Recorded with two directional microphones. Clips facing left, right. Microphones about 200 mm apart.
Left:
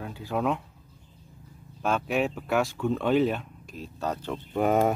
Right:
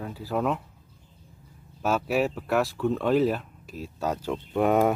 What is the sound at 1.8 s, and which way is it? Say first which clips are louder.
Speech: right 2 dB; 5° right (ahead or behind).